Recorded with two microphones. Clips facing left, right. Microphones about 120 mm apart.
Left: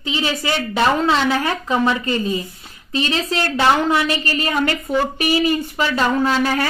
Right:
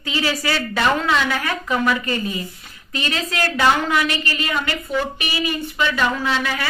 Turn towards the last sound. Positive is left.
turn(degrees=40)  # may be behind; listen again after turning